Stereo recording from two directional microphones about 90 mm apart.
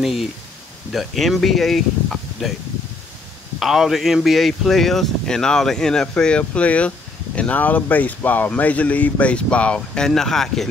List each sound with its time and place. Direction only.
0.0 s speech: centre (ahead or behind)
3.5 s speech: 5° right (ahead or behind)